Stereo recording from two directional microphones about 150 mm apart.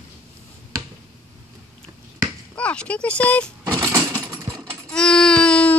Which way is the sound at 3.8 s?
20° right (ahead or behind).